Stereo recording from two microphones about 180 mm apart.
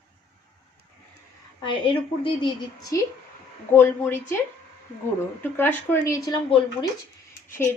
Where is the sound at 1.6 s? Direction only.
30° left (ahead or behind).